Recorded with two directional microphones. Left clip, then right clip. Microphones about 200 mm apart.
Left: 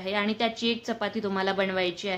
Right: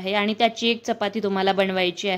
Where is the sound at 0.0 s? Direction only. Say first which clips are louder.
Right 6 dB; 40° right (ahead or behind).